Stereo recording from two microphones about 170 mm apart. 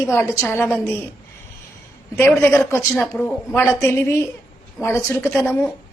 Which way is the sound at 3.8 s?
15° left (ahead or behind).